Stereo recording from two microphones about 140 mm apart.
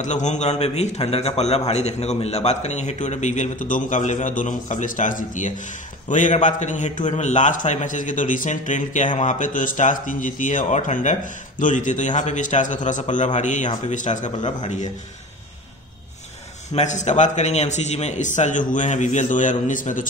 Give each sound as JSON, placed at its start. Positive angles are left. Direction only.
{"t": 0.0, "sound": "a man's voice", "side_deg": 60}
{"t": 16.7, "sound": "a man's voice", "side_deg": 55}